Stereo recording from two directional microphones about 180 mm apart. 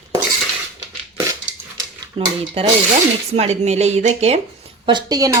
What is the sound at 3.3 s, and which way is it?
A woman's voice, 35° right (ahead or behind).